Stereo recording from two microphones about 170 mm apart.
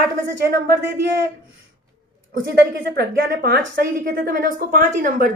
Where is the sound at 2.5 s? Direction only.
70° right (ahead or behind).